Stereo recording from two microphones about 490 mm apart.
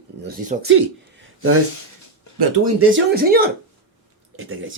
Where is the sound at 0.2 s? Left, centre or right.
Centre.